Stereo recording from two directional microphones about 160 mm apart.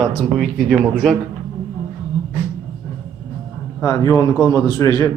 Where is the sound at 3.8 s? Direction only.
20° left (ahead or behind).